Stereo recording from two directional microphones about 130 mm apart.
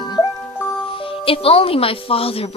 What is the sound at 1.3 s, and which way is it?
Speech, 45° left (ahead or behind).